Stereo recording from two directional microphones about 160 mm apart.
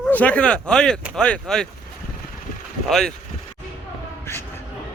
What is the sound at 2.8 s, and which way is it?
Speech, centre (ahead or behind).